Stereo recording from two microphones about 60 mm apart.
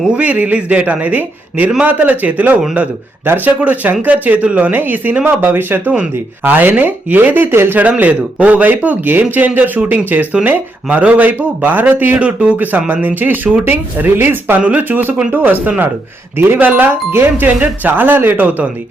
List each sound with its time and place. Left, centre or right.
0.1 s a man's voice: right
7.8 s a man's voice: right
14.6 s a man's voice: right